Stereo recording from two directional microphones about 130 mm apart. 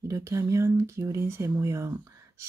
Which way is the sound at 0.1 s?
25° right (ahead or behind).